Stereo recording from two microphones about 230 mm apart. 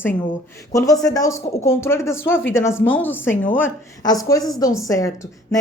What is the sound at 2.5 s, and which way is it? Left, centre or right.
A woman's voice, centre.